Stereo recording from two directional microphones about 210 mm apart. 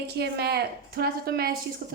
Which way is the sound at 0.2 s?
50° right (ahead or behind).